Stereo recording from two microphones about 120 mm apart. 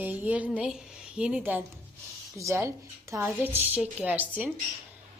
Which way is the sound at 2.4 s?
25° right (ahead or behind).